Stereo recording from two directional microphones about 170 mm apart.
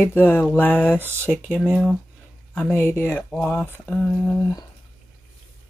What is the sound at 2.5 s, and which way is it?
Speech, 10° left (ahead or behind).